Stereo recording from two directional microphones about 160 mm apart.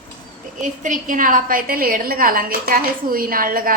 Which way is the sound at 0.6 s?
55° right (ahead or behind).